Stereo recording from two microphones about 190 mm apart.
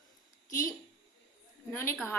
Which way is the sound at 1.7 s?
10° left (ahead or behind).